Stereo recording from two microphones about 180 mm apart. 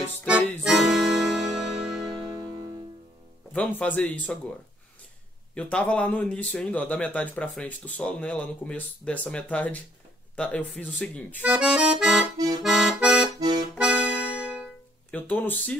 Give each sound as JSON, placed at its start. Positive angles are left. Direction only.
{"t": 0.3, "sound": "music", "side_deg": 0}
{"t": 2.0, "sound": "music", "side_deg": -20}
{"t": 3.5, "sound": "speech", "side_deg": 10}
{"t": 5.5, "sound": "speech", "side_deg": 5}
{"t": 11.4, "sound": "accordion", "side_deg": -5}
{"t": 12.6, "sound": "music", "side_deg": 0}
{"t": 15.0, "sound": "speech", "side_deg": 10}